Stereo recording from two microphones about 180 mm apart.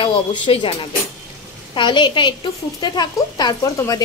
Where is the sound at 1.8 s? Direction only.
25° left (ahead or behind).